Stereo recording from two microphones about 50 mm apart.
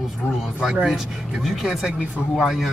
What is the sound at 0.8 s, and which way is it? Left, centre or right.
Speech, centre.